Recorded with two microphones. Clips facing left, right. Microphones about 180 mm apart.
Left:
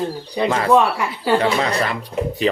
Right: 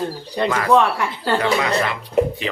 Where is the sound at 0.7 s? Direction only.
10° left (ahead or behind).